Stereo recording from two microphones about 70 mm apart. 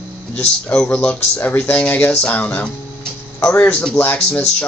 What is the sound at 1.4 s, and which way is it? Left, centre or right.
Speech, left.